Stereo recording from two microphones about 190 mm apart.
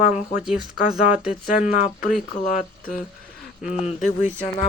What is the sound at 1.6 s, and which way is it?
Speech, 45° left (ahead or behind).